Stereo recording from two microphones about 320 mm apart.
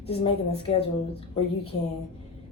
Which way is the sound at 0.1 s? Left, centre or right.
Centre.